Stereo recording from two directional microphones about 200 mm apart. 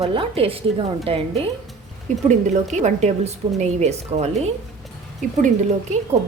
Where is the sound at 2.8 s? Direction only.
35° right (ahead or behind).